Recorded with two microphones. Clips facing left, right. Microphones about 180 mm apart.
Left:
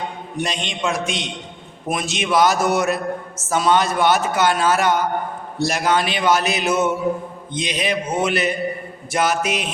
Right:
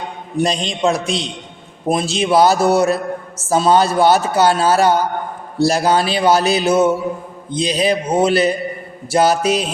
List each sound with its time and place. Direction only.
0.3 s a man's voice: 35° right (ahead or behind)